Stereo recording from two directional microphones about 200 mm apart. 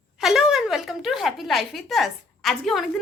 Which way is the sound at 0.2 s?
Centre (ahead or behind).